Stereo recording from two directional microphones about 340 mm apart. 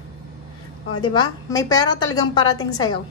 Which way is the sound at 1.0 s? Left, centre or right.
Centre.